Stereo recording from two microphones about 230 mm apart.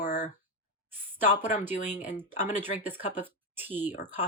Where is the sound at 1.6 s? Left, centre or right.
Centre.